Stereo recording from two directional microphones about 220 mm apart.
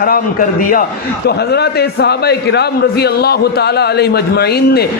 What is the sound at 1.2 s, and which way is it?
A man's voice, 45° left (ahead or behind).